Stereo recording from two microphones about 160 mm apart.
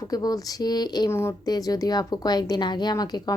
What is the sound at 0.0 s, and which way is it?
Speech, 25° left (ahead or behind).